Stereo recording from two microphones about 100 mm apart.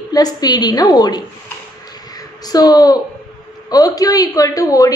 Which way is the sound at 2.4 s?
40° left (ahead or behind).